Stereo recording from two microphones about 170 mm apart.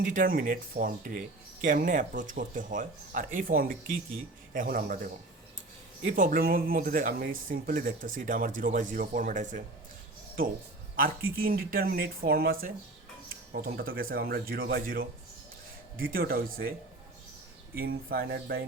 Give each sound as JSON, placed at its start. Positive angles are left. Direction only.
{"t": 0.0, "sound": "speech", "side_deg": -55}
{"t": 17.7, "sound": "speech", "side_deg": -65}